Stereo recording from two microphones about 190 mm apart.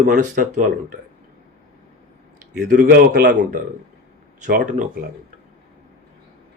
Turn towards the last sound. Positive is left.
turn(degrees=-45)  # may be behind; listen again after turning